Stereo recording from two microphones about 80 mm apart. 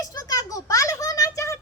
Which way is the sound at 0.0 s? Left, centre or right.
Left.